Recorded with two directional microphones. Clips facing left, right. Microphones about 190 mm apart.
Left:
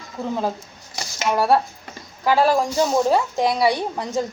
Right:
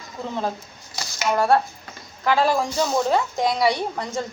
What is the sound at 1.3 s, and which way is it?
A woman's voice, 5° left (ahead or behind).